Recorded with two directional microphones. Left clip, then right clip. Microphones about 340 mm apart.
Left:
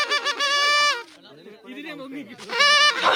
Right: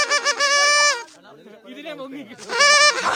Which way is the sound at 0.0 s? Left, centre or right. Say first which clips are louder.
Right 3 dB; centre.